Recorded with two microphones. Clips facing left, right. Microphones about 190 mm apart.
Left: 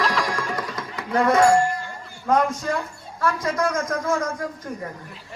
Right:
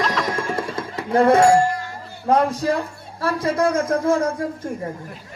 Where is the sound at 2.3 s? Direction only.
35° right (ahead or behind).